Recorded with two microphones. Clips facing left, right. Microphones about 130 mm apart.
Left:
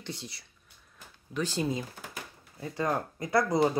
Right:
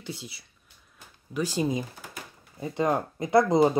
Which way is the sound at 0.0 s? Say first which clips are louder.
Right 2 dB; 5° right (ahead or behind).